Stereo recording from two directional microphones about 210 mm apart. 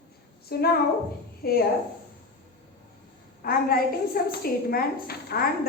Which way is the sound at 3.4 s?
45° left (ahead or behind).